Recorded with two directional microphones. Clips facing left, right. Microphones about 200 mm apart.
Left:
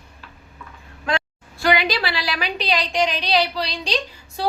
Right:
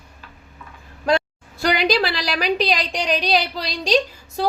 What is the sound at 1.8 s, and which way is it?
A woman's voice, 40° right (ahead or behind).